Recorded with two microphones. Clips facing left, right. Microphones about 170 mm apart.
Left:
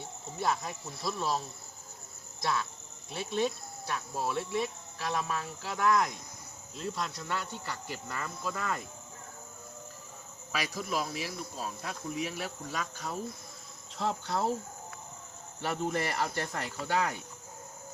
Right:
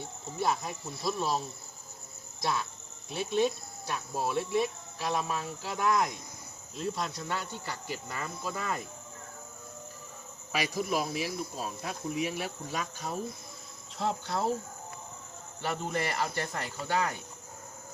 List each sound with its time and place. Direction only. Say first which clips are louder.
1.0 s cricket: right 2 dB; 5° right (ahead or behind)
2.4 s speech: even; 5° right (ahead or behind)
3.9 s cricket: right 2 dB; 10° right (ahead or behind)
4.5 s speech: right 4 dB; 25° right (ahead or behind)
5.4 s cricket: even; 15° right (ahead or behind)
10.5 s cricket: right 3 dB; 15° right (ahead or behind)
14.0 s cricket: even; centre (ahead or behind)
15.6 s cricket: left 1 dB; centre (ahead or behind)